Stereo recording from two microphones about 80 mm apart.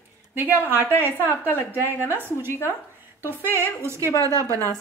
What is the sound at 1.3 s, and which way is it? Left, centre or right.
Speech, left.